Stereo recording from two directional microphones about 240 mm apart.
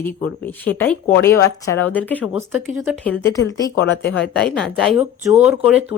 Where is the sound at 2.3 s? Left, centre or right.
Centre.